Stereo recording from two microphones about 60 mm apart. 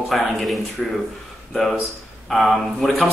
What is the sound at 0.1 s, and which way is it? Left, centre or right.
Speech, centre.